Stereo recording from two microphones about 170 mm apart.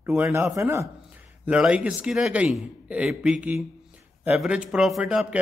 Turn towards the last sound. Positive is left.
turn(degrees=-5)  # may be behind; listen again after turning